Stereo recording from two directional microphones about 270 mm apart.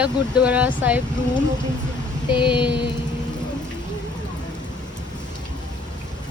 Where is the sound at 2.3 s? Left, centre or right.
Centre.